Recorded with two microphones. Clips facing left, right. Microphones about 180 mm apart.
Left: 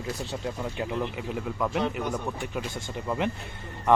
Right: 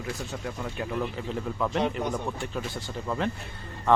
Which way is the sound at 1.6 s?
5° left (ahead or behind).